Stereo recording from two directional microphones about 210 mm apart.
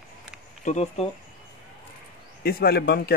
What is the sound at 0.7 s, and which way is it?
Speech, 30° left (ahead or behind).